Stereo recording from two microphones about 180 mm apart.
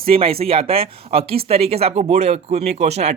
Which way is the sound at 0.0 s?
30° right (ahead or behind).